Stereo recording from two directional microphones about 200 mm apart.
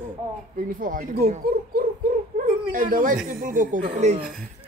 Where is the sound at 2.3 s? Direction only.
45° right (ahead or behind).